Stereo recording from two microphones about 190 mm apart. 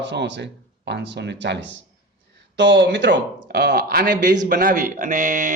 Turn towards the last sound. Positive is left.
turn(degrees=-45)  # may be behind; listen again after turning